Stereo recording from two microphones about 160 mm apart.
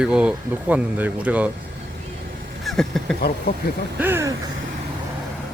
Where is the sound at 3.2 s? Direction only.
70° left (ahead or behind).